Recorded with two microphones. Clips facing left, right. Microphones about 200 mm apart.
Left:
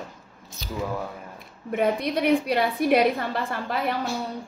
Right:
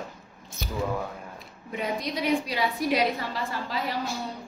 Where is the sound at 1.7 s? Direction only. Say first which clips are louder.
Left 7 dB; 55° left (ahead or behind).